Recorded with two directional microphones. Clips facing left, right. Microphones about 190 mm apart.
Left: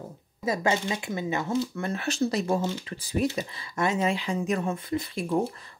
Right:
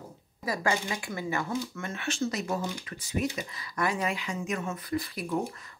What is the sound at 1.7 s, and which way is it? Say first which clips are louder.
Speech: left 5 dB; 35° left (ahead or behind).